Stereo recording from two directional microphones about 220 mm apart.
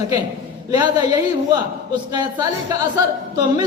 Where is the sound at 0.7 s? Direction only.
15° right (ahead or behind).